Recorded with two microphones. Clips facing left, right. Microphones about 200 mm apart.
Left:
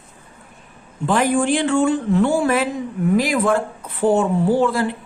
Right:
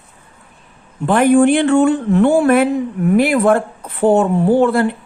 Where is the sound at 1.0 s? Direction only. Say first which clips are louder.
Right 7 dB; 60° right (ahead or behind).